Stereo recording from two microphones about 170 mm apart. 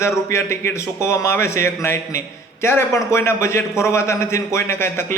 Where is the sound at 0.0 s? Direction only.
15° left (ahead or behind).